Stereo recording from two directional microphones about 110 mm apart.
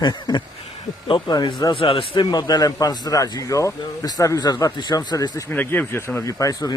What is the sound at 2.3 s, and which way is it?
Speech, 40° left (ahead or behind).